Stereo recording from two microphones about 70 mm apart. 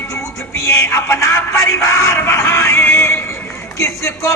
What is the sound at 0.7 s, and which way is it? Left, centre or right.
Speech, left.